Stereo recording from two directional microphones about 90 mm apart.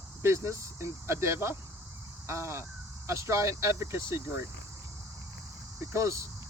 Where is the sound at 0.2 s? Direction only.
30° right (ahead or behind).